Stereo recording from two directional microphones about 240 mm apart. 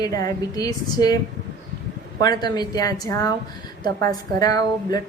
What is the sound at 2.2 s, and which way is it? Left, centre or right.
A woman's voice, centre.